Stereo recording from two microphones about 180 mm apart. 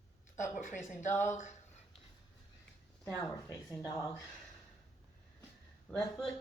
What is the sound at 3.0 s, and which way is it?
Speech, 20° left (ahead or behind).